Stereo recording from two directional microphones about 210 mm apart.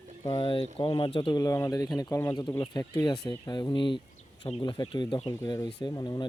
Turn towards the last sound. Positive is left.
turn(degrees=20)  # may be behind; listen again after turning